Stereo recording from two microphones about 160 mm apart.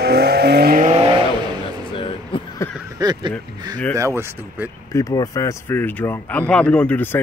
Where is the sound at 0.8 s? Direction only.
35° right (ahead or behind).